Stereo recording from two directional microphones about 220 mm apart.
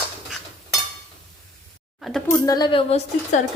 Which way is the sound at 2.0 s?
Centre (ahead or behind).